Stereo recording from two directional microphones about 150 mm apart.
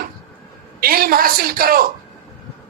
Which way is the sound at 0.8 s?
80° right.